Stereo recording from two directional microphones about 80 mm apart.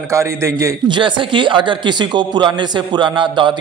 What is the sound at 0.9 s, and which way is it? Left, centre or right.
A man's voice, right.